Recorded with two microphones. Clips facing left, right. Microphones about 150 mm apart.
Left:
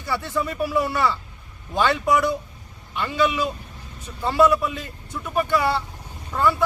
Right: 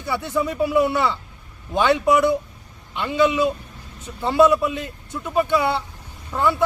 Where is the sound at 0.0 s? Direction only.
20° right (ahead or behind).